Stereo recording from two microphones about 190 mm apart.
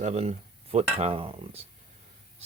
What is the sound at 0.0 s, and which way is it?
Speech, 35° right (ahead or behind).